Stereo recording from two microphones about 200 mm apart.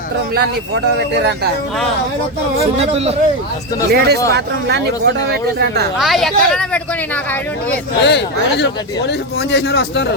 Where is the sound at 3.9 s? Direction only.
50° right (ahead or behind).